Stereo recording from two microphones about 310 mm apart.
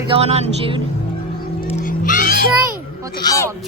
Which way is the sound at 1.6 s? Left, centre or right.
Left.